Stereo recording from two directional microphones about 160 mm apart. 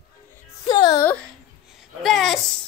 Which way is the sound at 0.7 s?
25° left (ahead or behind).